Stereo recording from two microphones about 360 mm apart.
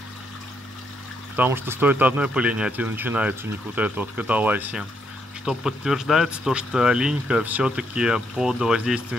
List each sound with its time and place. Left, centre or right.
1.3 s speech: centre